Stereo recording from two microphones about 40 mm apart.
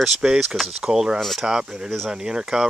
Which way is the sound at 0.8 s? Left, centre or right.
Centre.